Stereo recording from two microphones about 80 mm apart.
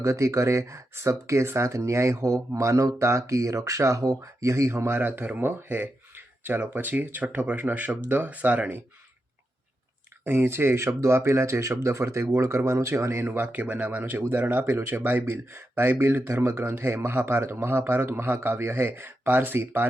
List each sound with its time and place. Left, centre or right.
0.0 s speech: right; by 8.8 s centre
10.2 s speech: right